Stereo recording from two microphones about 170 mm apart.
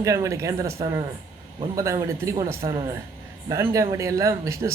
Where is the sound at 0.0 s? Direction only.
15° right (ahead or behind).